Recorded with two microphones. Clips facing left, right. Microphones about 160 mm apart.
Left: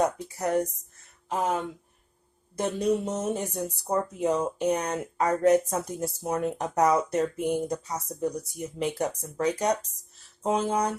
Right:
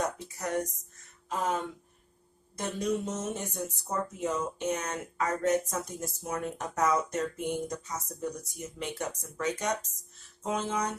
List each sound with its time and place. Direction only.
0.0 s speech: 30° left (ahead or behind)